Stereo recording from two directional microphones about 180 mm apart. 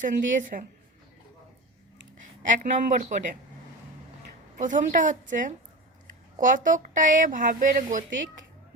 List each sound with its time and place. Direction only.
0.0 s a woman's voice: 45° right (ahead or behind)
2.4 s a woman's voice: 45° right (ahead or behind)
4.5 s a woman's voice: 45° right (ahead or behind)